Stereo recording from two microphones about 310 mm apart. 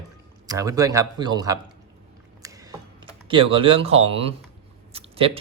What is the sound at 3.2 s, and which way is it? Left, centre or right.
Speech, centre.